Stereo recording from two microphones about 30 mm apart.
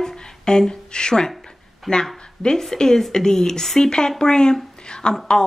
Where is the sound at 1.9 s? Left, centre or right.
Centre.